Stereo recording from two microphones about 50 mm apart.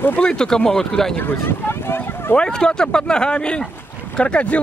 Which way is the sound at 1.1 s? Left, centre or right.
Left.